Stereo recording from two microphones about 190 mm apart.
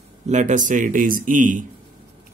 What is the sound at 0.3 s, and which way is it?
Speech, 40° right (ahead or behind).